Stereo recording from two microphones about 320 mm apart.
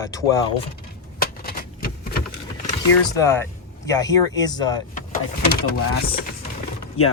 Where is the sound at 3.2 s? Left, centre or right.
Centre.